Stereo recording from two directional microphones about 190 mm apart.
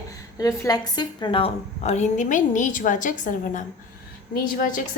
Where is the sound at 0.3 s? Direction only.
20° left (ahead or behind).